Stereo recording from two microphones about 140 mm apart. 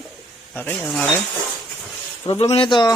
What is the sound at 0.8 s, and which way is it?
Speech, centre (ahead or behind).